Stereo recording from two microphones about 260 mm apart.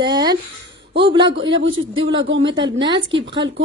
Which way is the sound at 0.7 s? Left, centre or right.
Right.